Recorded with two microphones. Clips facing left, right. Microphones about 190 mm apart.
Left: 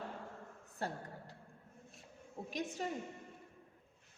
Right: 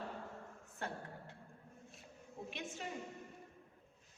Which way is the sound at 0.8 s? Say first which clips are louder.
Left 3 dB; 35° left (ahead or behind).